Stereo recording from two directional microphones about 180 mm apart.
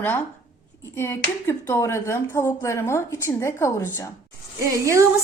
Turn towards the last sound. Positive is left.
turn(degrees=-15)  # may be behind; listen again after turning